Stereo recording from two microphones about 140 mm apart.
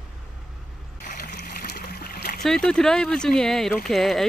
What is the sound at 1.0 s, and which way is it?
Splash, 80° left.